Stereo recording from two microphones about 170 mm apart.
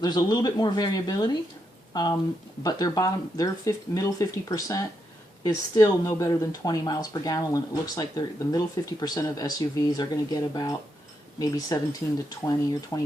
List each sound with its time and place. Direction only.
0.0 s speech: 25° left (ahead or behind)
12.9 s speech: 20° left (ahead or behind)